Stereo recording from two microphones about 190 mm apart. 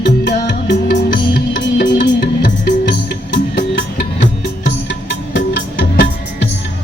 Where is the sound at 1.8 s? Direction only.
50° left (ahead or behind).